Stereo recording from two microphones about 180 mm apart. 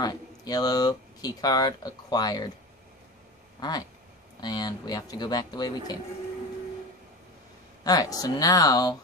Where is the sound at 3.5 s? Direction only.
20° left (ahead or behind).